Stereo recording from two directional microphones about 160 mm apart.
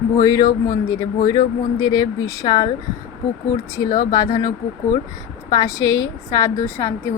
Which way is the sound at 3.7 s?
25° left (ahead or behind).